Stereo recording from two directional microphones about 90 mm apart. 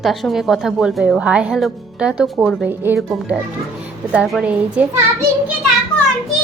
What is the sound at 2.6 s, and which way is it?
Speech, 25° right (ahead or behind).